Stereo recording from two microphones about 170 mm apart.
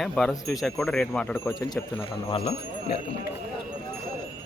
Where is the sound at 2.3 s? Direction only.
40° left (ahead or behind).